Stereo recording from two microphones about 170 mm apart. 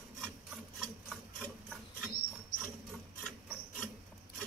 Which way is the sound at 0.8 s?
5° left (ahead or behind).